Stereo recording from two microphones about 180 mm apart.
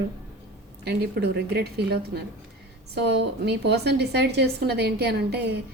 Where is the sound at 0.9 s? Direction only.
65° right (ahead or behind).